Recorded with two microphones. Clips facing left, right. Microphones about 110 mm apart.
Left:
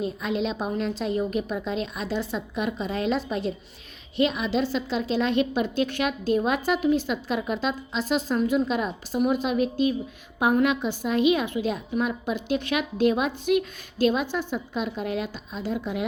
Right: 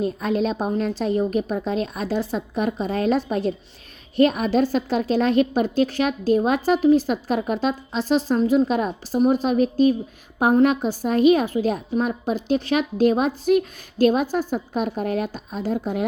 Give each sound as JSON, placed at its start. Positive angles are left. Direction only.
{"t": 0.0, "sound": "a woman's voice", "side_deg": -45}